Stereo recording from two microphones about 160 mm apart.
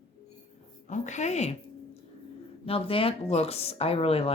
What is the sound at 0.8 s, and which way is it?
Speech, 50° left (ahead or behind).